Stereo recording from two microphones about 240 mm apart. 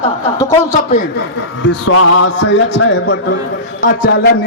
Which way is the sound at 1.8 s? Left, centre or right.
Left.